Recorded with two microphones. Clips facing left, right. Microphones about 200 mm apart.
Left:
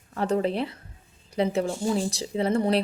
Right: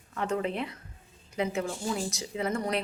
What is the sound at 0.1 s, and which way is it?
A woman's voice, 35° left (ahead or behind).